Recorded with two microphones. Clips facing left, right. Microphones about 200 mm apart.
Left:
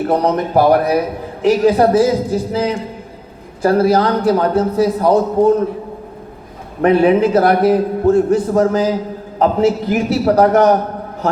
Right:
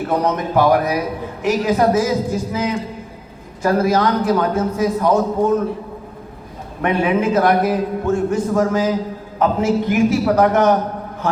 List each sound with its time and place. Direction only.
0.1 s a man's voice: 35° left (ahead or behind)
6.8 s a man's voice: 35° left (ahead or behind)